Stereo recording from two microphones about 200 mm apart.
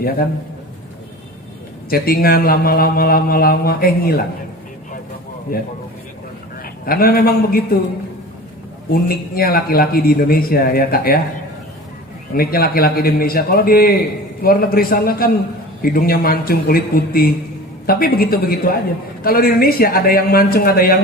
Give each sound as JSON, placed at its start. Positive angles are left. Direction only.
{"t": 1.9, "sound": "a man's voice", "side_deg": 50}
{"t": 5.5, "sound": "a man's voice", "side_deg": 50}
{"t": 6.8, "sound": "a man's voice", "side_deg": 45}
{"t": 8.9, "sound": "a man's voice", "side_deg": 50}
{"t": 12.3, "sound": "a man's voice", "side_deg": 50}